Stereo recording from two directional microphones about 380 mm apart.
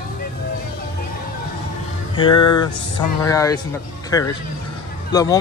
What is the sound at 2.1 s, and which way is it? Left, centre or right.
Speech, centre.